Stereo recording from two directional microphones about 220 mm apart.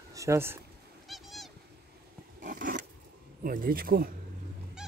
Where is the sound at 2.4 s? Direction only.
35° right (ahead or behind).